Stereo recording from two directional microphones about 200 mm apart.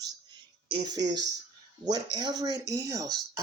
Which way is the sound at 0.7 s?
20° right (ahead or behind).